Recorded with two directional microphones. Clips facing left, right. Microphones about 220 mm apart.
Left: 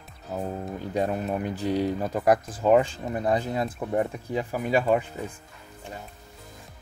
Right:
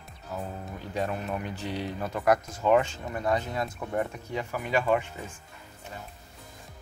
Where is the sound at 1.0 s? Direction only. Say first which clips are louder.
Left 3 dB; 35° left (ahead or behind).